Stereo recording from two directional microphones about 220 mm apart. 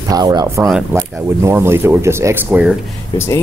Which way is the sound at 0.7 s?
5° right (ahead or behind).